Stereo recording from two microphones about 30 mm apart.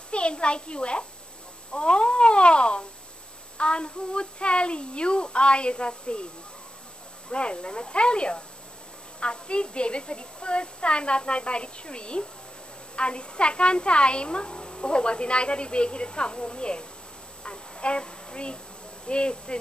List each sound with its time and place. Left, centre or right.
0.1 s a child's voice: left
7.2 s a woman's voice: left
17.4 s a sound: left
19.0 s a woman's voice: left